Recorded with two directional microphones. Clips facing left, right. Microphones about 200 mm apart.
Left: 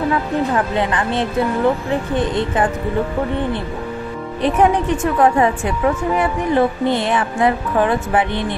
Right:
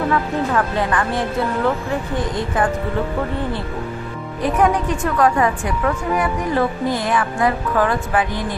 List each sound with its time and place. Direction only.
0.6 s a woman's voice: 20° left (ahead or behind)
4.4 s a woman's voice: 25° left (ahead or behind)